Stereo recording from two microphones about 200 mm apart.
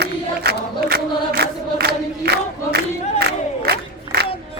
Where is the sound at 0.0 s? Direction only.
55° right (ahead or behind).